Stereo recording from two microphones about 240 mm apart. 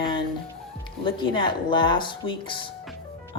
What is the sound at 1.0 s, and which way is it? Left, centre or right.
Speech, centre.